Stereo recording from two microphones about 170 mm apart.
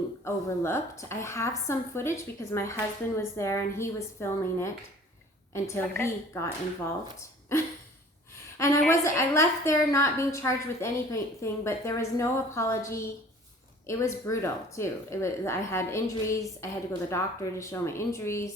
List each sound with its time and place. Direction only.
0.3 s a woman's voice: 15° left (ahead or behind)